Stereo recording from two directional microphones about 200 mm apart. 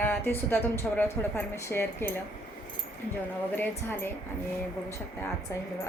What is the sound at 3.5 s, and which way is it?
Speech, 10° left (ahead or behind).